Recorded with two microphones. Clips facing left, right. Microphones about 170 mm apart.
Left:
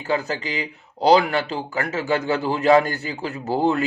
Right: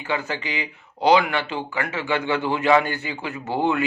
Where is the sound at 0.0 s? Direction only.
40° left (ahead or behind).